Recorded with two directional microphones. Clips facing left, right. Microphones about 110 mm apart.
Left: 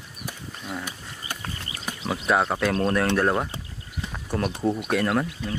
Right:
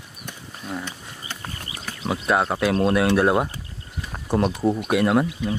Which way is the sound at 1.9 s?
15° left (ahead or behind).